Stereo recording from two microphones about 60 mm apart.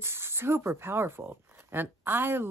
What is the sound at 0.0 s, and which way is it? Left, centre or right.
Speech, right.